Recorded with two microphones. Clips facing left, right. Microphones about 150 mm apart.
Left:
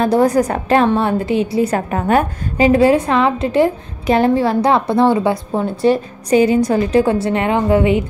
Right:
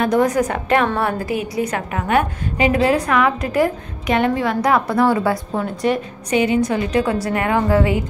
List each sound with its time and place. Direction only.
0.0 s a woman's voice: 35° left (ahead or behind)